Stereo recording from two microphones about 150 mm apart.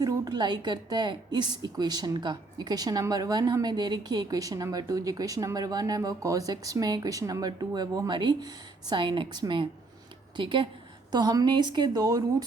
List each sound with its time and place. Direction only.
0.0 s a woman's voice: 25° right (ahead or behind)